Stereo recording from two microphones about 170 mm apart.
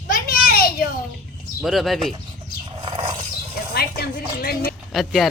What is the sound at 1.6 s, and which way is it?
Speech, centre (ahead or behind).